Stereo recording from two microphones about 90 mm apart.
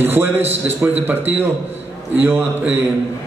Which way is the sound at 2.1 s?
15° right (ahead or behind).